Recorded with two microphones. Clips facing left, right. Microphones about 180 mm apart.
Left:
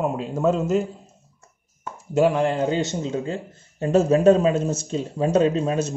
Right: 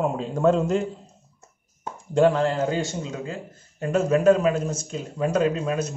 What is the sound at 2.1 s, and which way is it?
Speech, 10° left (ahead or behind).